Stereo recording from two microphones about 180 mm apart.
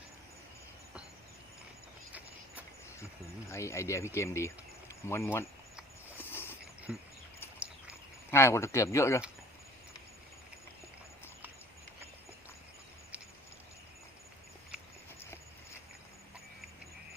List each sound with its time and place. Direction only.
3.5 s speech: 15° left (ahead or behind)
6.1 s a sound: 10° left (ahead or behind)
6.9 s speech: centre (ahead or behind)
8.3 s speech: 15° left (ahead or behind)